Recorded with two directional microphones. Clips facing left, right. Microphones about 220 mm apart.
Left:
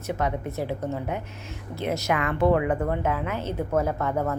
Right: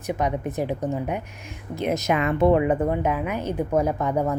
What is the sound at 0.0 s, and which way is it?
Speech, 15° right (ahead or behind).